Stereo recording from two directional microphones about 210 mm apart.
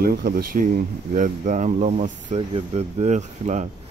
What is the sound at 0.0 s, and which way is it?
Speech, 45° right (ahead or behind).